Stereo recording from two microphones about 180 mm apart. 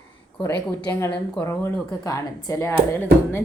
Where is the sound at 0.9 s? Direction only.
15° left (ahead or behind).